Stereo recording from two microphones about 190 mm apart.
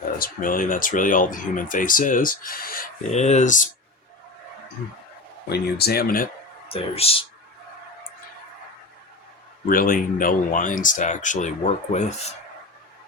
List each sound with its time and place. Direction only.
0.2 s speech: 45° left (ahead or behind)
3.1 s speech: 35° left (ahead or behind)
5.5 s speech: 55° left (ahead or behind)
6.7 s speech: 30° left (ahead or behind)
9.6 s speech: 45° left (ahead or behind)